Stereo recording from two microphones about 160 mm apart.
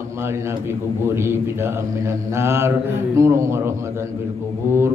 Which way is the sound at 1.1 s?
15° right (ahead or behind).